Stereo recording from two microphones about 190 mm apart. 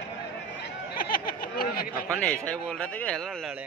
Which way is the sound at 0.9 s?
50° left (ahead or behind).